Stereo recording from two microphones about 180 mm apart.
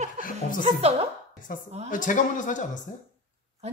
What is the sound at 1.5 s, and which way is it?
A man's voice, 50° left (ahead or behind).